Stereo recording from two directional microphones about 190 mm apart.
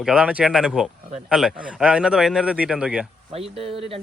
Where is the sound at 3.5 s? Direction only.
30° right (ahead or behind).